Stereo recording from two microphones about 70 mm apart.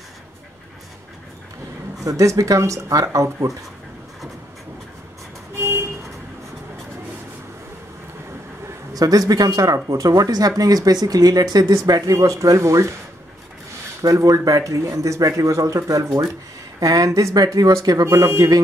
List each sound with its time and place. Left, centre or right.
2.0 s speech: right
5.6 s vehicle: right
8.9 s speech: right
11.6 s speech: right
14.0 s speech: right
18.0 s speech: right